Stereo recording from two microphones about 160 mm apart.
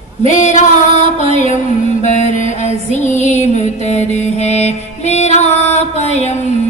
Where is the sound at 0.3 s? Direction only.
50° left (ahead or behind).